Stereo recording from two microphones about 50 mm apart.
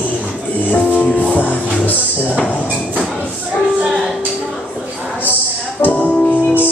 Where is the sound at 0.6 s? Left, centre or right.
Left.